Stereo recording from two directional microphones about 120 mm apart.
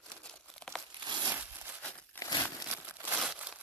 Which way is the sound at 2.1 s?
15° left (ahead or behind).